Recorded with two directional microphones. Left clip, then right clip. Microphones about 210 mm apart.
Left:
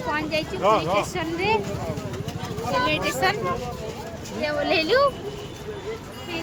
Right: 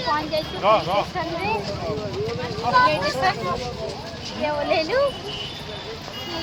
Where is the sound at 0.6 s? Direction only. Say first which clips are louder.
Right 2 dB; 45° left (ahead or behind).